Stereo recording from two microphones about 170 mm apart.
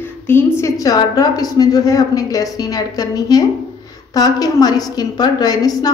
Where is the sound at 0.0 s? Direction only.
10° left (ahead or behind).